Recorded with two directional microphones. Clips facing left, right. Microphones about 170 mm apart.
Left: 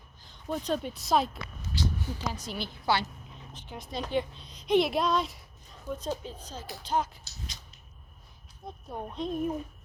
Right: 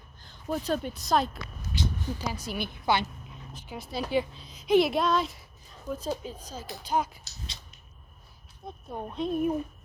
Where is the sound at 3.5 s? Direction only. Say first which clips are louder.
Right 2 dB; 10° right (ahead or behind).